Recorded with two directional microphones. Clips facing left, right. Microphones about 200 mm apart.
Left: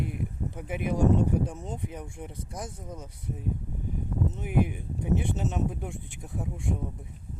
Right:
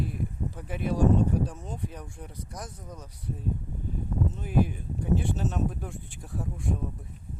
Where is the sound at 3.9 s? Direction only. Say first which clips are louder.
Even; 20° left (ahead or behind).